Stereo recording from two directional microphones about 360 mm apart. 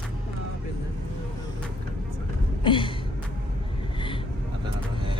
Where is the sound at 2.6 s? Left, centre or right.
Centre.